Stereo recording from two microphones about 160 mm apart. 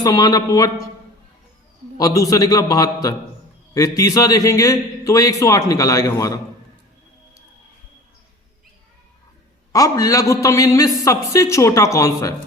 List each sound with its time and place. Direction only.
0.0 s a man's voice: 25° left (ahead or behind)
2.0 s a man's voice: 20° left (ahead or behind)
9.7 s a man's voice: 20° left (ahead or behind)